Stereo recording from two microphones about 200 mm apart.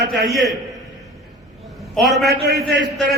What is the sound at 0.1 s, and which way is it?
Speech, centre (ahead or behind).